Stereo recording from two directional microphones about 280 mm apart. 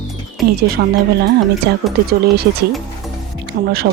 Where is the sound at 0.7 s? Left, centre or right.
Right.